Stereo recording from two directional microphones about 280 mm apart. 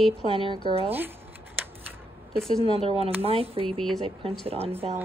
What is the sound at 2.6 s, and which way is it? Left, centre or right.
Speech, centre.